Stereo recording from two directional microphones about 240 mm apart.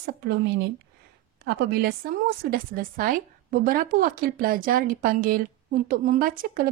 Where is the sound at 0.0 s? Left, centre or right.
Right.